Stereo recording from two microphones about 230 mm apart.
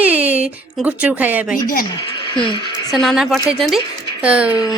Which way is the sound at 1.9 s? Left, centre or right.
Centre.